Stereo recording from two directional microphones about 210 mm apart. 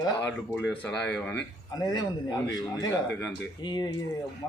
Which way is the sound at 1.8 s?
20° left (ahead or behind).